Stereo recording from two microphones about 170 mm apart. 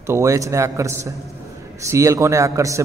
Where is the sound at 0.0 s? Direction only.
15° right (ahead or behind).